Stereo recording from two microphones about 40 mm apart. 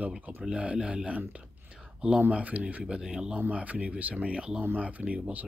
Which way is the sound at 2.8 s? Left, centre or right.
Centre.